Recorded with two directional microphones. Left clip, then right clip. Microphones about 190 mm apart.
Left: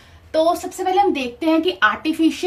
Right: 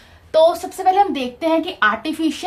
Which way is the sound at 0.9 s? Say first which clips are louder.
Right 1 dB; 35° right (ahead or behind).